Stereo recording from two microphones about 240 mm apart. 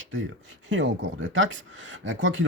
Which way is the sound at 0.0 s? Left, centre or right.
Right.